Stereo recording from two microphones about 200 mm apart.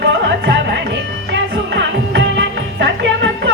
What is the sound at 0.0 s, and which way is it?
Music, 60° right (ahead or behind).